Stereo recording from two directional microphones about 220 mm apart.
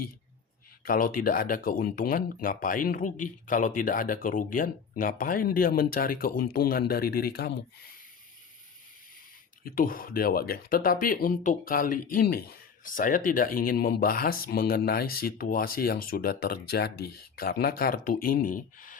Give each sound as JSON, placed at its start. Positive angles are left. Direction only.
{"t": 0.9, "sound": "speech", "side_deg": 40}
{"t": 9.6, "sound": "speech", "side_deg": 40}